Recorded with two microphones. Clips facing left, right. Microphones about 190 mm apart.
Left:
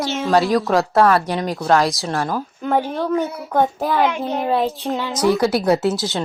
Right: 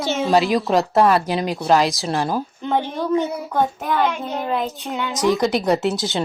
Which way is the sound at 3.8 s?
35° left (ahead or behind).